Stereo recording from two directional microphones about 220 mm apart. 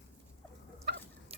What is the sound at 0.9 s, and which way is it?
Chicken, 50° right (ahead or behind).